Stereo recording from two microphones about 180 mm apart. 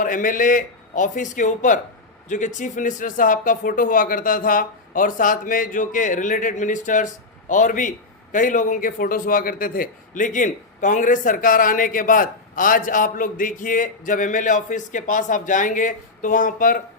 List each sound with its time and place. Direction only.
0.0 s speech: 50° left (ahead or behind)